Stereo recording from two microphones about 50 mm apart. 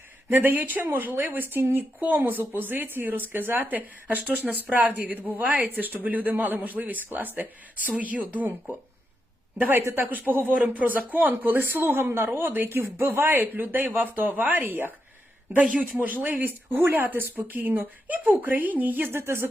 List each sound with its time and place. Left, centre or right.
0.3 s speech: right
9.6 s speech: right
15.6 s speech: right
16.0 s speech: right
19.1 s speech: right